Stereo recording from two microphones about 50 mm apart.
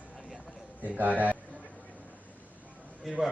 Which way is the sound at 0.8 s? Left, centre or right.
Right.